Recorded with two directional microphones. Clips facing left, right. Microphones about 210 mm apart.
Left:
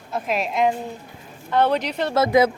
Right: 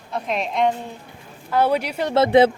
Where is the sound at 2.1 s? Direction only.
30° right (ahead or behind).